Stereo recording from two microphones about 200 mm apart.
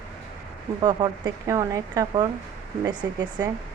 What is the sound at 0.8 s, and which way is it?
Speech, 20° right (ahead or behind).